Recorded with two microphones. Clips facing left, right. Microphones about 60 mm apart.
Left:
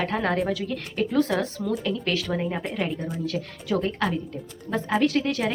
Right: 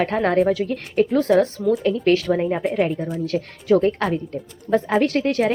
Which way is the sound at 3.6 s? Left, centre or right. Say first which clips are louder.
Right 9 dB; right.